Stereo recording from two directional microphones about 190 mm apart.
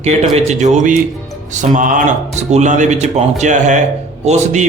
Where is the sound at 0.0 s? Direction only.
35° right (ahead or behind).